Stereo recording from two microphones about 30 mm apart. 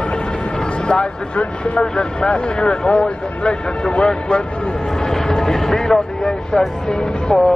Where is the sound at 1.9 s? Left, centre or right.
Left.